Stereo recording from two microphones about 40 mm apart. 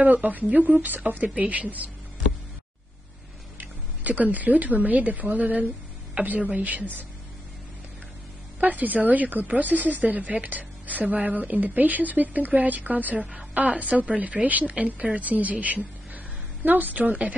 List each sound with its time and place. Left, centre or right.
0.0 s a woman's voice: right
3.5 s a woman's voice: right
8.5 s a woman's voice: right
13.2 s a woman's voice: right